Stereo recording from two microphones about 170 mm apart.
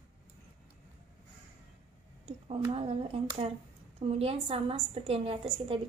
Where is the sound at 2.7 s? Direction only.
35° right (ahead or behind).